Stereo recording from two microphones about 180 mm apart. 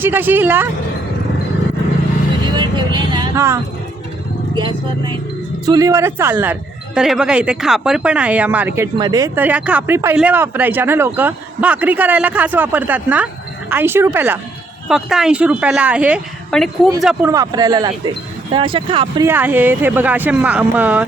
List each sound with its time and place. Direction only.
0.0 s speech: 10° right (ahead or behind)
2.6 s a woman's voice: 25° right (ahead or behind); by 16.9 s centre (ahead or behind)
17.2 s speech: 20° right (ahead or behind)
19.2 s speech: 10° right (ahead or behind)